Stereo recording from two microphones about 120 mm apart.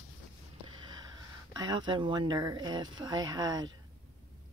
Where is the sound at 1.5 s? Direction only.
35° right (ahead or behind).